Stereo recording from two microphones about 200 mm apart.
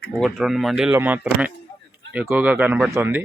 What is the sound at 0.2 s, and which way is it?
Speech, centre (ahead or behind).